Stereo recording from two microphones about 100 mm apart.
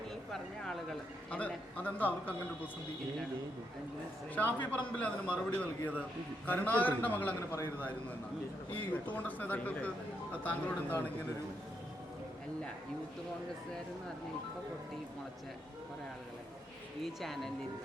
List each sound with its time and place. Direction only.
0.3 s speech: 5° left (ahead or behind)
1.4 s a man's voice: 15° left (ahead or behind)
4.4 s a man's voice: 20° left (ahead or behind)
8.8 s a man's voice: 15° left (ahead or behind)
17.0 s speech: centre (ahead or behind)